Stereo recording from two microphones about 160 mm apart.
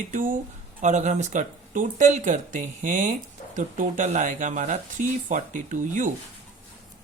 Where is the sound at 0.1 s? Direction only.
60° right (ahead or behind).